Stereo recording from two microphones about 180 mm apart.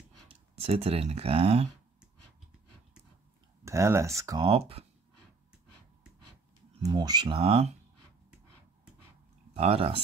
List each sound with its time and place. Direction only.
0.3 s speech: 35° right (ahead or behind)
3.6 s speech: 15° right (ahead or behind)
4.5 s speech: 30° right (ahead or behind)
6.8 s speech: 20° right (ahead or behind)
9.5 s speech: 35° right (ahead or behind)